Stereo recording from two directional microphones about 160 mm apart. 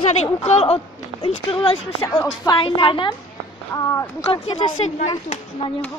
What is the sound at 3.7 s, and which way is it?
Speech, 20° left (ahead or behind).